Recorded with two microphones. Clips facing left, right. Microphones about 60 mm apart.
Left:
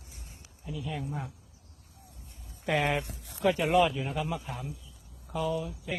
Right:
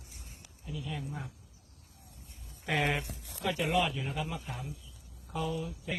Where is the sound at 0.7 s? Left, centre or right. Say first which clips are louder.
Left 3 dB; centre.